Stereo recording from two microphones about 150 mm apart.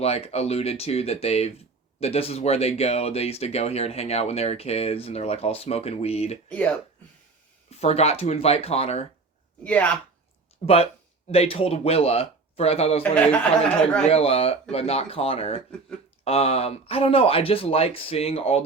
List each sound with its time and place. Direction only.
0.0 s speech: 45° left (ahead or behind)
6.5 s speech: 10° left (ahead or behind)
7.7 s speech: 45° left (ahead or behind)
9.6 s speech: 10° left (ahead or behind)
10.6 s speech: 50° left (ahead or behind)
13.0 s speech: 10° left (ahead or behind)
14.1 s speech: 40° left (ahead or behind)